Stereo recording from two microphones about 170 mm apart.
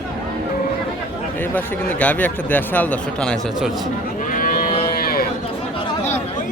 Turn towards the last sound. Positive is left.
turn(degrees=60)  # may be behind; listen again after turning